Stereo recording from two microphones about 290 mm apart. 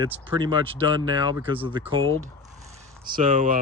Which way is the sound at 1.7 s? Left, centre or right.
Centre.